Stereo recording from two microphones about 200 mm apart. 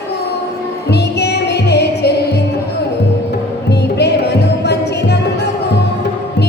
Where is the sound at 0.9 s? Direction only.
55° left (ahead or behind).